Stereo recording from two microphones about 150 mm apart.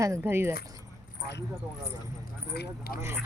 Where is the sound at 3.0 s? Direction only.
15° right (ahead or behind).